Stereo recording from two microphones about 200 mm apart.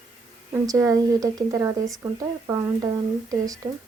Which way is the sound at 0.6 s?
15° right (ahead or behind).